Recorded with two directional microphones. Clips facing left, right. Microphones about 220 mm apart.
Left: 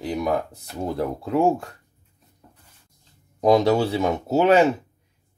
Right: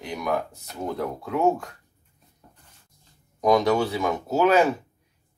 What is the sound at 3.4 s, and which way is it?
Speech, 30° left (ahead or behind).